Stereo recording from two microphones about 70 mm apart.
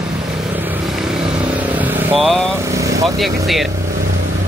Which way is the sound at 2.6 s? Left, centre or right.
Right.